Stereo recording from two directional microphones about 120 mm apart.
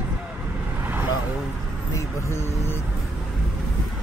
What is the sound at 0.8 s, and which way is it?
Vehicle, 15° right (ahead or behind).